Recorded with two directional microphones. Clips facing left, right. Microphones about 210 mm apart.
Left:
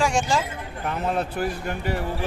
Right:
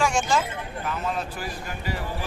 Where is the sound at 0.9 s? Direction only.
60° left (ahead or behind).